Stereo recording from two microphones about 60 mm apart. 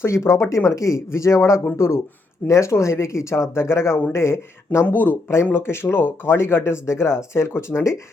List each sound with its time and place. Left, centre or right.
0.0 s speech: left